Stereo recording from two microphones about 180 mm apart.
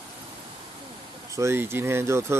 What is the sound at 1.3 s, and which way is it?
Speech, 15° right (ahead or behind).